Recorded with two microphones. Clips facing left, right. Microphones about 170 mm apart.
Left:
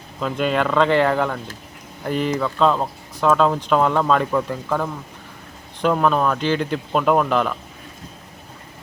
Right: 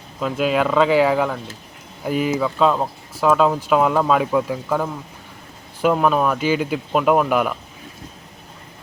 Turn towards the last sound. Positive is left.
turn(degrees=-10)  # may be behind; listen again after turning